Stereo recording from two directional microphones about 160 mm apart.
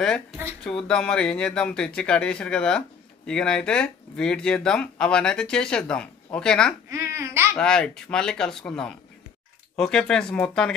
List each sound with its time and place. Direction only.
0.7 s speech: 5° left (ahead or behind)
6.9 s babbling: 15° right (ahead or behind)
7.5 s speech: 5° left (ahead or behind)